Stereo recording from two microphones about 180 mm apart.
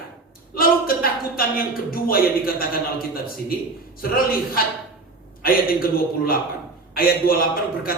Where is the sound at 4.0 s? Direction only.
55° left (ahead or behind).